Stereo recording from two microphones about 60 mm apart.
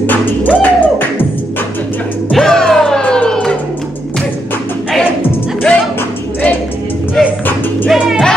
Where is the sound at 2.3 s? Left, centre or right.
Centre.